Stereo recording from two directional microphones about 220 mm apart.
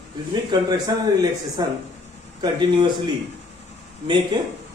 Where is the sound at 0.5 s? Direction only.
20° right (ahead or behind).